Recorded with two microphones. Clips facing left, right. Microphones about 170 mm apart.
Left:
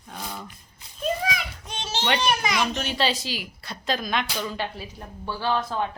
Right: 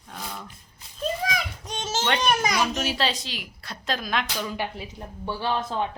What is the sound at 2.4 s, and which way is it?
Speech, 40° right (ahead or behind).